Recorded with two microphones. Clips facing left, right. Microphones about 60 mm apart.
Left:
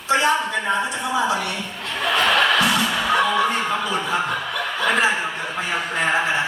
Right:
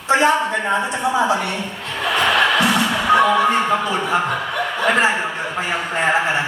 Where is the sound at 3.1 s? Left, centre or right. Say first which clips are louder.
Right 6 dB; right.